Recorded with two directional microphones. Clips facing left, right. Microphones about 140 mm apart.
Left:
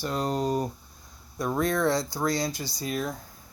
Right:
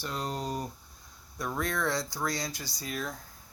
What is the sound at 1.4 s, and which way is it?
Speech, 30° left (ahead or behind).